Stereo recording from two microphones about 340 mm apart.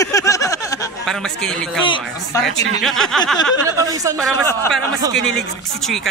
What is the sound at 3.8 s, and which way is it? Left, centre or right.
Speech, centre.